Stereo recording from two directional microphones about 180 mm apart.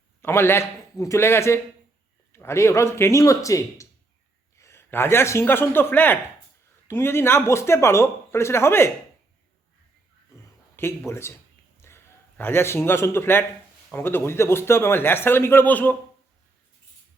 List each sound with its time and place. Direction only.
0.2 s a man's voice: 15° left (ahead or behind)
10.8 s a man's voice: 15° left (ahead or behind)